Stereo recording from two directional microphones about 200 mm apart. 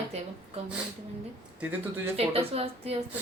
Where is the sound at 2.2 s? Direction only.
30° right (ahead or behind).